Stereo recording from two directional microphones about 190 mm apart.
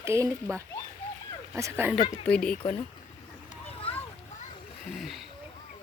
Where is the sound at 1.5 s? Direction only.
15° right (ahead or behind).